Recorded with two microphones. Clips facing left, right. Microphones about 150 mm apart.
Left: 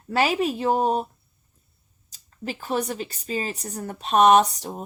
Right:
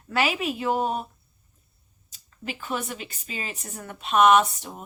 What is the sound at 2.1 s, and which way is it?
A woman's voice, 35° left (ahead or behind).